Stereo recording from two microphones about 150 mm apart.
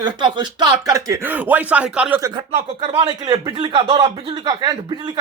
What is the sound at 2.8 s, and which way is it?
Speech, 30° right (ahead or behind).